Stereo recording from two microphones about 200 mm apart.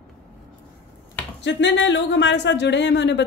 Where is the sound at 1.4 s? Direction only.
65° left (ahead or behind).